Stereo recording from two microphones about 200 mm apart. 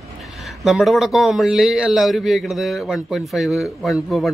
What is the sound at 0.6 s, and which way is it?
A man's voice, centre (ahead or behind).